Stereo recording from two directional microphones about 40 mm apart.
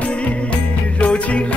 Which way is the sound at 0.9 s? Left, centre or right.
Left.